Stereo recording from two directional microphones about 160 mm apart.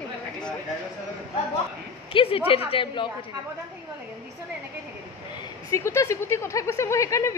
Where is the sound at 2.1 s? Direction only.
35° left (ahead or behind).